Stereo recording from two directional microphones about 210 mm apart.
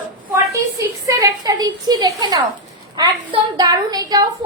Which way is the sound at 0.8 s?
15° right (ahead or behind).